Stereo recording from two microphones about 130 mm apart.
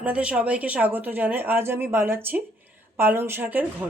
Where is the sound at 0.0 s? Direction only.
10° right (ahead or behind).